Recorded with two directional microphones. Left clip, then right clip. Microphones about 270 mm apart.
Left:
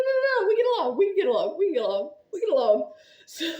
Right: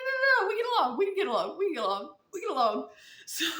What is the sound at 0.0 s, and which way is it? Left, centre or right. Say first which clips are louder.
A man's voice: left 3 dB; centre.